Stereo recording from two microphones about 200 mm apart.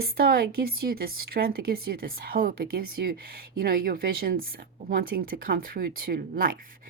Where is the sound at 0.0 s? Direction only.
50° right (ahead or behind).